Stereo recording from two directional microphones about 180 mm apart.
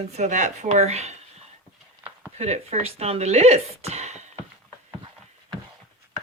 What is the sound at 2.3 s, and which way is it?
Speech, 40° right (ahead or behind).